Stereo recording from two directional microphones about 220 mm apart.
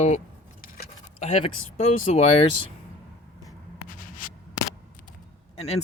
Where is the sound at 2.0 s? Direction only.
30° left (ahead or behind).